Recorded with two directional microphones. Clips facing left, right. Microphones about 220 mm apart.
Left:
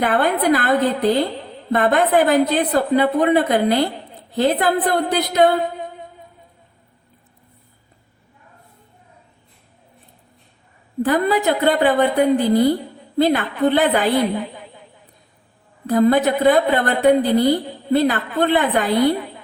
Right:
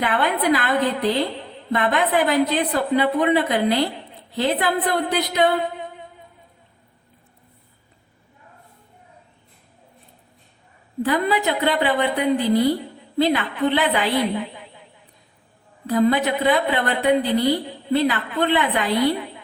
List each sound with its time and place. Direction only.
0.0 s a woman's voice: 45° left (ahead or behind)
11.0 s a woman's voice: 45° left (ahead or behind)
15.9 s a woman's voice: 45° left (ahead or behind)